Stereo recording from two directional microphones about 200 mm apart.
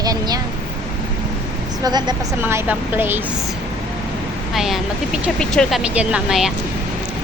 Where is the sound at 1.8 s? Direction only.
20° right (ahead or behind).